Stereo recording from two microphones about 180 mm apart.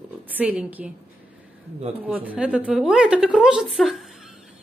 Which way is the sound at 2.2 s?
5° right (ahead or behind).